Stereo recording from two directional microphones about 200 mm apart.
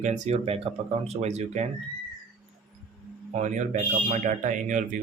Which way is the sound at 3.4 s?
40° right (ahead or behind).